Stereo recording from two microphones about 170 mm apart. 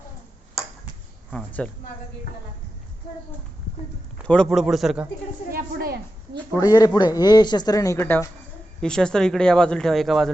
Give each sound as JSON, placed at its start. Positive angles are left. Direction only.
{"t": 1.3, "sound": "speech", "side_deg": 5}
{"t": 4.3, "sound": "speech", "side_deg": 0}
{"t": 5.5, "sound": "a woman's voice", "side_deg": -65}
{"t": 6.5, "sound": "speech", "side_deg": 20}